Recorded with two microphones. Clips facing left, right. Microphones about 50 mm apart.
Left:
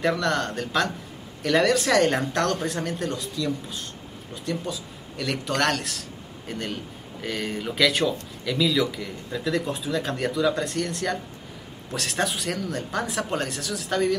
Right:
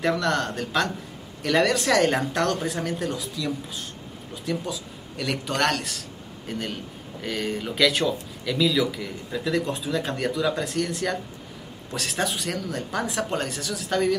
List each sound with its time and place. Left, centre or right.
0.0 s speech: centre